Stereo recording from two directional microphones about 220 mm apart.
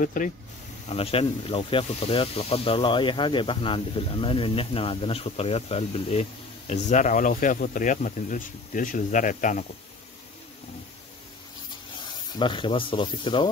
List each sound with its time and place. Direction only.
0.0 s speech: 35° left (ahead or behind)
0.8 s speech: 25° left (ahead or behind)
12.4 s speech: 20° left (ahead or behind)